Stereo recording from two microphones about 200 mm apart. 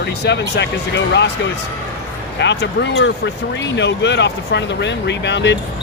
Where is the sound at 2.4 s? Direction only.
60° left (ahead or behind).